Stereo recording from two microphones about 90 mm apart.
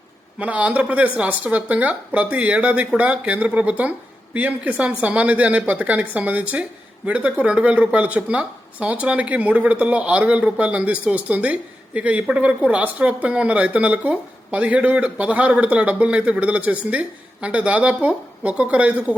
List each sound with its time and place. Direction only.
0.3 s a woman's voice: 15° right (ahead or behind)